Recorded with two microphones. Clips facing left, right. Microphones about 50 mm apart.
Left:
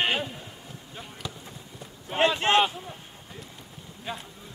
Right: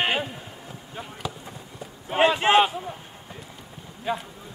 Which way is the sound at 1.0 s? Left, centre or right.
Centre.